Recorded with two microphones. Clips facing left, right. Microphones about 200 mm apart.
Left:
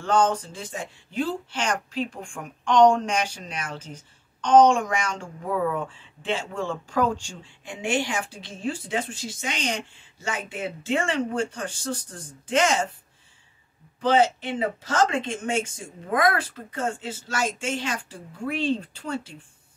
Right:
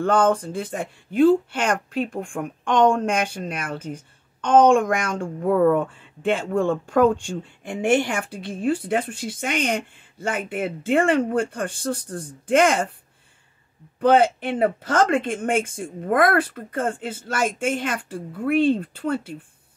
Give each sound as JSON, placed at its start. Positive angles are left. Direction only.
{"t": 0.0, "sound": "speech", "side_deg": -55}
{"t": 13.9, "sound": "speech", "side_deg": -55}